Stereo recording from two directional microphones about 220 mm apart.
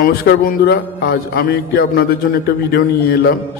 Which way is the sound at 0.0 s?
45° left (ahead or behind).